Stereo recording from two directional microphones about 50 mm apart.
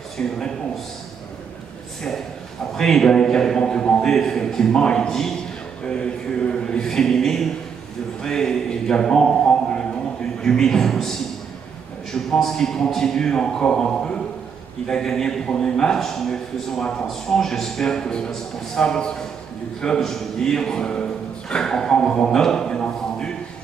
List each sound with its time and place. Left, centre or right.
0.2 s a man's voice: centre
2.7 s a man's voice: centre